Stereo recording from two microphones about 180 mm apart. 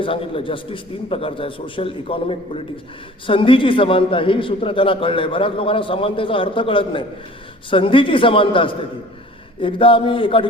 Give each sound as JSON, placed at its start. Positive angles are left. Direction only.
{"t": 0.0, "sound": "a man's voice", "side_deg": 30}